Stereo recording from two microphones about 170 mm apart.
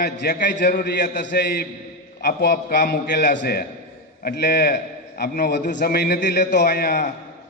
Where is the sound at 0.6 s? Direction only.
75° left (ahead or behind).